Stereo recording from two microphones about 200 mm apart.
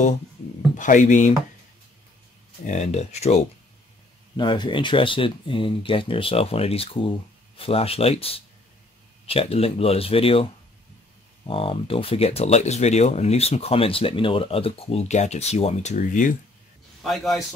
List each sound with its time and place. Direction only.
0.7 s speech: 40° left (ahead or behind)
2.6 s speech: 35° left (ahead or behind)
4.4 s speech: 25° left (ahead or behind); by 16.3 s 40° left (ahead or behind)
17.0 s a man's voice: centre (ahead or behind)